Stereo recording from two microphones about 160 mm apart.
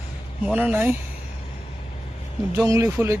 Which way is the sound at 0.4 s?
10° right (ahead or behind).